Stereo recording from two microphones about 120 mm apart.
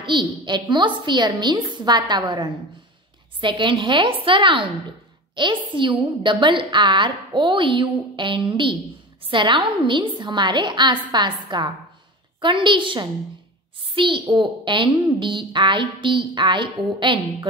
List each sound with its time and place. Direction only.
0.1 s a woman's voice: 40° right (ahead or behind)